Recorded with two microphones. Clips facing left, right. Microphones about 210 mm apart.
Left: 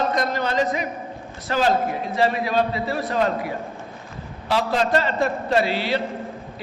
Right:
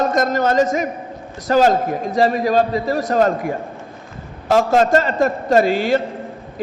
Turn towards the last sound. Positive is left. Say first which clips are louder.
# right 6 dB
turn(degrees=-45)  # may be behind; listen again after turning